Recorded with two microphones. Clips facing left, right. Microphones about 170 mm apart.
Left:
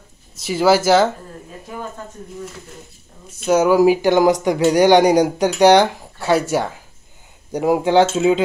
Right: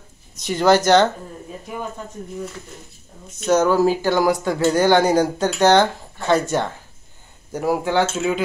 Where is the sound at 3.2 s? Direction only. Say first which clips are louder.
Left 2 dB; 10° left (ahead or behind).